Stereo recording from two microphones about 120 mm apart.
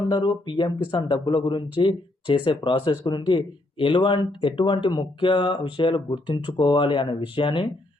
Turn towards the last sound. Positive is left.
turn(degrees=45)  # may be behind; listen again after turning